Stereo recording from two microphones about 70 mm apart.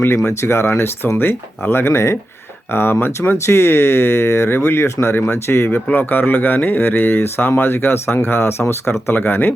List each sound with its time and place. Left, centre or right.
0.3 s speech: left